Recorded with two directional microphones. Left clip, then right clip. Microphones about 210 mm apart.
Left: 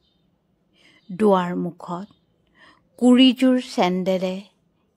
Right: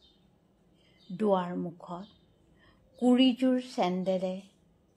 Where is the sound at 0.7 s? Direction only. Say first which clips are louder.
Left 11 dB; 35° left (ahead or behind).